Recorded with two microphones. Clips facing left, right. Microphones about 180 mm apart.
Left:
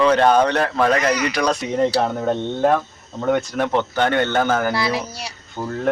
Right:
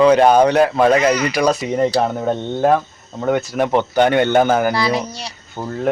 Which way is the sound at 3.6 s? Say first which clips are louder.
Right 7 dB; 15° right (ahead or behind).